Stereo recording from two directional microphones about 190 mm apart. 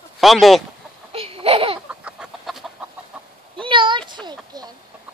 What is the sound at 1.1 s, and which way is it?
Laughter, 30° right (ahead or behind).